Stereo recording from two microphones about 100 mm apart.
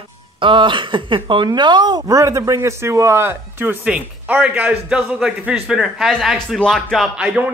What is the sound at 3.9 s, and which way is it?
Speech, 10° right (ahead or behind).